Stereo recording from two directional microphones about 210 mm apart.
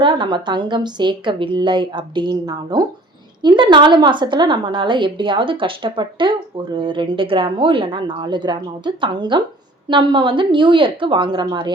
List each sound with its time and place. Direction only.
0.0 s a woman's voice: 20° right (ahead or behind)